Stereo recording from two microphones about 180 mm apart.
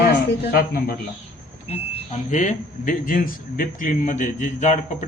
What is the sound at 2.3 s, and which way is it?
A man's voice, 45° left (ahead or behind).